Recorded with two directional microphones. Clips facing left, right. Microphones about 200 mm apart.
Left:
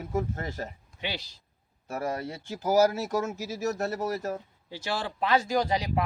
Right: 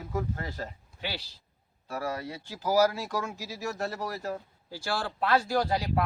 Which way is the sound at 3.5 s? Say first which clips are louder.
Left 6 dB; 40° left (ahead or behind).